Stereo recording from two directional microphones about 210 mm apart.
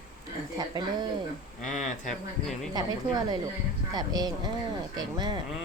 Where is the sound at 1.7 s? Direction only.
35° left (ahead or behind).